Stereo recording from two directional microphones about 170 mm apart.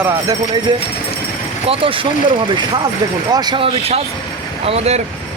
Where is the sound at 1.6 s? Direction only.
35° right (ahead or behind).